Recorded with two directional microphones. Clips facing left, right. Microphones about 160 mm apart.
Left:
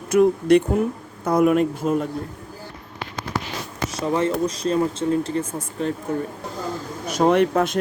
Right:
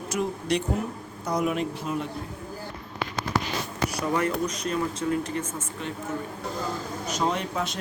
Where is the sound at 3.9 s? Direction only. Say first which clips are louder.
Left 6 dB; 25° left (ahead or behind).